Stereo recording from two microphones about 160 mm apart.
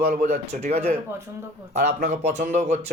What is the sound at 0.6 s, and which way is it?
Speech, 40° right (ahead or behind).